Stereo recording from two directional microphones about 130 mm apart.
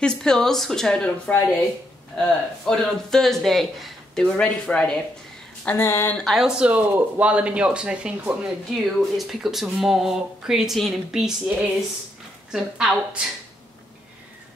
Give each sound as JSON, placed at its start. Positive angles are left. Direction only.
{"t": 0.0, "sound": "speech", "side_deg": 5}
{"t": 5.7, "sound": "a woman's voice", "side_deg": 20}
{"t": 6.1, "sound": "a woman's voice", "side_deg": 0}